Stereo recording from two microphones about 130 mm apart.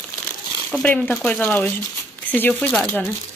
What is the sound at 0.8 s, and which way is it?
Speech, 10° left (ahead or behind).